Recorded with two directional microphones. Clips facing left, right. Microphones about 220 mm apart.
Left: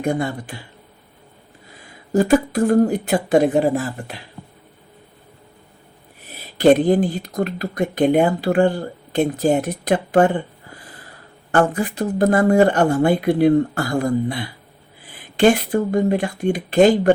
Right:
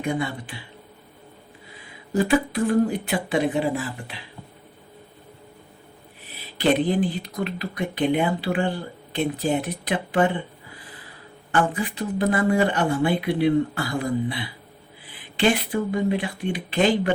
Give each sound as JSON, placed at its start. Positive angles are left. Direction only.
{"t": 0.0, "sound": "speech", "side_deg": 45}
{"t": 2.1, "sound": "speech", "side_deg": 45}
{"t": 6.3, "sound": "speech", "side_deg": 45}
{"t": 11.5, "sound": "speech", "side_deg": 45}